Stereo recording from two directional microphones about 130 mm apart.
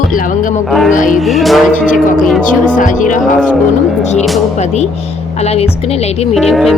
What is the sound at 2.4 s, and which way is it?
Speech, 90° left.